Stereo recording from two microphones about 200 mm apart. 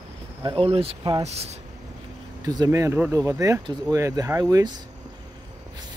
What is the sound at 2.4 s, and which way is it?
Speech, 20° right (ahead or behind).